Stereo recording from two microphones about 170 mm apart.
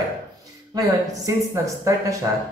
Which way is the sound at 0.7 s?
20° right (ahead or behind).